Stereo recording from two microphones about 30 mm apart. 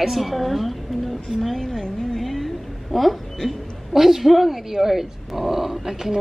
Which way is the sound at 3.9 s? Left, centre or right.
Centre.